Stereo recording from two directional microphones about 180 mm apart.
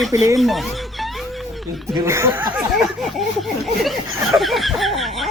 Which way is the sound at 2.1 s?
15° right (ahead or behind).